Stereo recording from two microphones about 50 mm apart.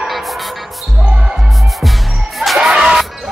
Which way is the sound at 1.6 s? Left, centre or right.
Centre.